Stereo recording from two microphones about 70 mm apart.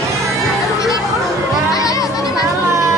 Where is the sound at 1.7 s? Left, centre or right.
Left.